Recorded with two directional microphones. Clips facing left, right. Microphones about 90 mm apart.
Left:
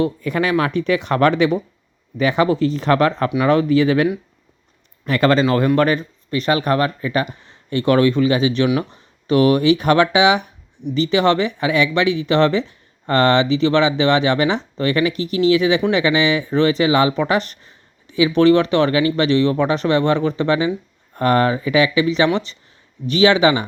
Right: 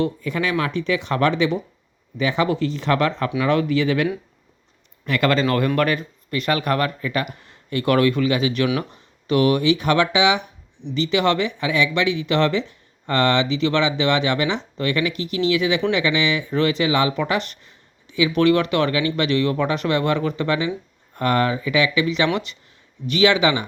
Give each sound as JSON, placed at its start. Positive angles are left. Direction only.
{"t": 0.2, "sound": "speech", "side_deg": 50}
{"t": 5.5, "sound": "speech", "side_deg": 25}